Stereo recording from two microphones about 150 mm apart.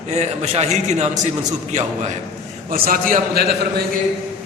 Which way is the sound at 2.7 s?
65° right (ahead or behind).